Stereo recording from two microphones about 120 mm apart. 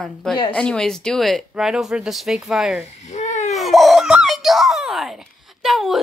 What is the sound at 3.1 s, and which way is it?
Babbling, 75° left (ahead or behind).